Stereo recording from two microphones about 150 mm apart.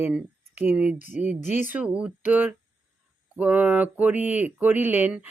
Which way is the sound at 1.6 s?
10° right (ahead or behind).